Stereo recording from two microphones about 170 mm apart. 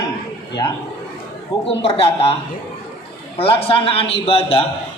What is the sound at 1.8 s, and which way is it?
A man's voice, 35° left (ahead or behind).